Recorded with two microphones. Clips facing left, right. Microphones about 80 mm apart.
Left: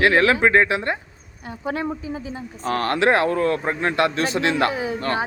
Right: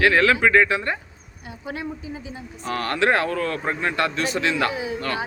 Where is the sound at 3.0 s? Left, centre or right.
Left.